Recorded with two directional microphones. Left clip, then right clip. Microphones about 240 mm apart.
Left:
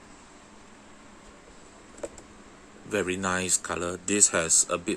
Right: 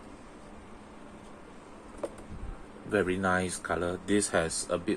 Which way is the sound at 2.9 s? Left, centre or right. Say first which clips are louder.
Even; left.